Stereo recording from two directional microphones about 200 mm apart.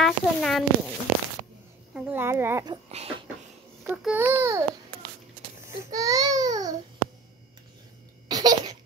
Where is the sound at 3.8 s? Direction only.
5° right (ahead or behind).